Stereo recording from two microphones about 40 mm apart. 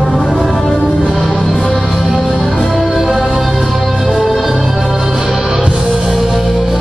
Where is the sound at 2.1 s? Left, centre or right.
Centre.